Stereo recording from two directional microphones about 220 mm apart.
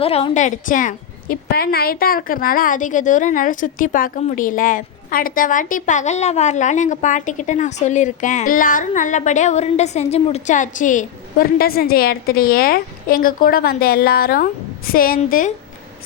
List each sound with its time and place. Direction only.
0.0 s a woman's voice: 25° left (ahead or behind)